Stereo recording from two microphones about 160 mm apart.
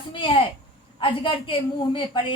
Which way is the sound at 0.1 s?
35° left (ahead or behind).